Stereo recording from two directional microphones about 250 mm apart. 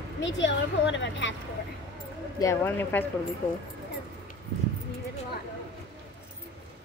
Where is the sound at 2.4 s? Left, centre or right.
Centre.